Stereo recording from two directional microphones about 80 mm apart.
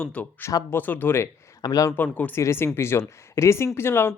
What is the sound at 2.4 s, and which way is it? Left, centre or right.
Speech, left.